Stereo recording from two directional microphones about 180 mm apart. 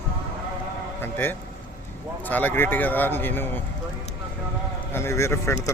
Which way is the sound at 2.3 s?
10° left (ahead or behind).